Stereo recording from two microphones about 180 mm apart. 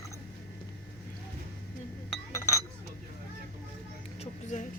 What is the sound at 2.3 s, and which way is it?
Chink, 15° left (ahead or behind).